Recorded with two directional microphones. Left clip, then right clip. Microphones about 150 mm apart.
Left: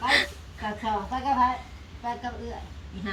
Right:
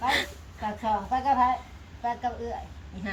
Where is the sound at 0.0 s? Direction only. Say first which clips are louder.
Left 3 dB; 20° right (ahead or behind).